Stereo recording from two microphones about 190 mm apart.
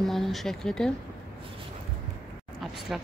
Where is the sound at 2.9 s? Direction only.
5° right (ahead or behind).